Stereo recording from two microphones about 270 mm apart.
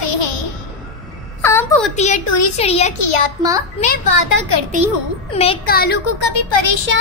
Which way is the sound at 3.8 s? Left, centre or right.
Left.